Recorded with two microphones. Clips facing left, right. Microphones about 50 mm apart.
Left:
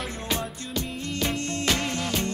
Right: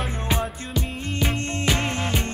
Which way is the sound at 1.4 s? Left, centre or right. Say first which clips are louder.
Right 2 dB; right.